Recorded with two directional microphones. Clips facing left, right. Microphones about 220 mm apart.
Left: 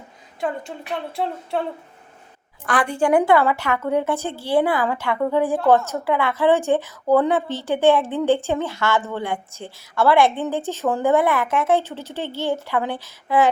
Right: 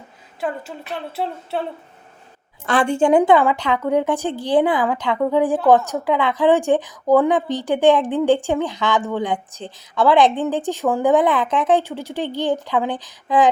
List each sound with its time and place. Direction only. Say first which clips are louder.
2.6 s a woman's voice: right 3 dB; 25° right (ahead or behind)